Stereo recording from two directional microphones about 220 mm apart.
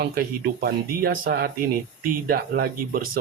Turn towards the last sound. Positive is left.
turn(degrees=-40)  # may be behind; listen again after turning